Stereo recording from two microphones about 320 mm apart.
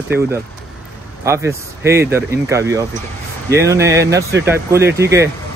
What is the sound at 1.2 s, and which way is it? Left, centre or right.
Speech, centre.